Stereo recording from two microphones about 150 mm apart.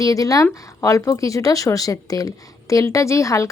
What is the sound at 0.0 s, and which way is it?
Speech, 25° left (ahead or behind).